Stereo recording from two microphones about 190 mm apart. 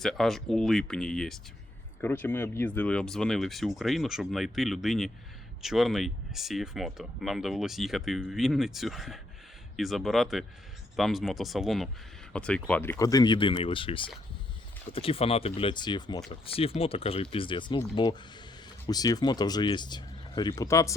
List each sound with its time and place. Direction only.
0.0 s speech: centre (ahead or behind); by 20.9 s 15° left (ahead or behind)